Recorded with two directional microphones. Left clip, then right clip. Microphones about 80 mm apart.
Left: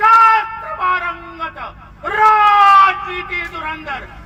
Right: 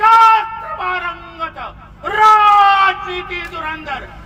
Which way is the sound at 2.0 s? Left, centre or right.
Centre.